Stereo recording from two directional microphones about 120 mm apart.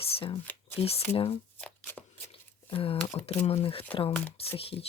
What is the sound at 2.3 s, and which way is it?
Squish, 50° left (ahead or behind).